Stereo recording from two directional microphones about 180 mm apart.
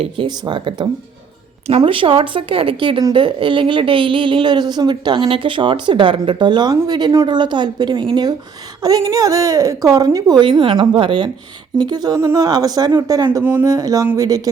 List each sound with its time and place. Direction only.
0.0 s speech: 25° right (ahead or behind)